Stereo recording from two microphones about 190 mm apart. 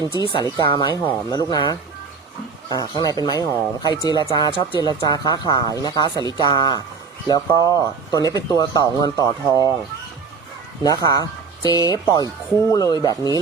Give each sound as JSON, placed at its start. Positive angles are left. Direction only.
{"t": 0.2, "sound": "speech", "side_deg": 25}
{"t": 10.8, "sound": "speech", "side_deg": 20}